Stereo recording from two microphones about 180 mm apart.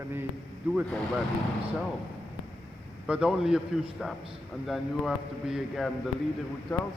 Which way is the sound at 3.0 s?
5° right (ahead or behind).